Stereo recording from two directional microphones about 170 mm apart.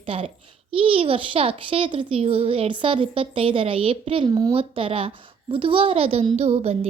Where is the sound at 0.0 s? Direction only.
30° right (ahead or behind).